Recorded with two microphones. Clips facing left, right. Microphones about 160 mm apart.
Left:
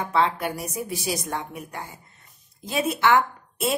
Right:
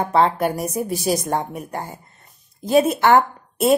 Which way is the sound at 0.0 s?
45° right (ahead or behind).